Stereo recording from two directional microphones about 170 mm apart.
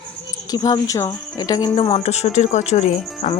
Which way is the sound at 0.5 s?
20° left (ahead or behind).